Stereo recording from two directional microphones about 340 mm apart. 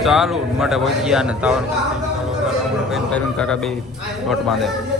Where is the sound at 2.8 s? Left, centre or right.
Centre.